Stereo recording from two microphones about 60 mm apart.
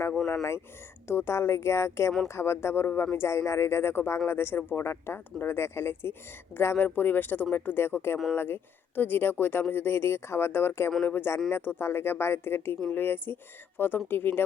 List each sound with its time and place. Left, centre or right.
1.0 s speech: left
3.2 s speech: left